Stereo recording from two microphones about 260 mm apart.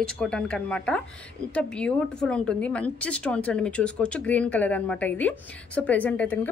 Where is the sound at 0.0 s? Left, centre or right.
Centre.